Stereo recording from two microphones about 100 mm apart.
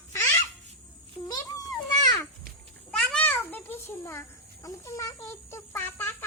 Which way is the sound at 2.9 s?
10° left (ahead or behind).